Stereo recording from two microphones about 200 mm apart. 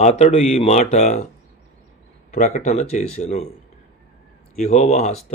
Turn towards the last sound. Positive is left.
turn(degrees=35)  # may be behind; listen again after turning